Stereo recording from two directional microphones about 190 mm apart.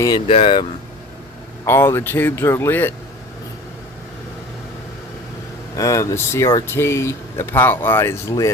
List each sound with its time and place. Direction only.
0.3 s speech: 30° left (ahead or behind)
1.6 s speech: 10° left (ahead or behind)
5.7 s speech: 15° left (ahead or behind)